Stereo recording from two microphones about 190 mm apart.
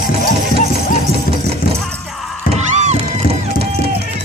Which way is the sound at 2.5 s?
35° right (ahead or behind).